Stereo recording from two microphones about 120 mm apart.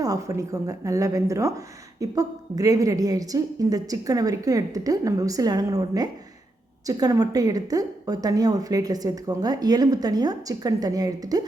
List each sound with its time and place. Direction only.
0.0 s a woman's voice: 30° right (ahead or behind)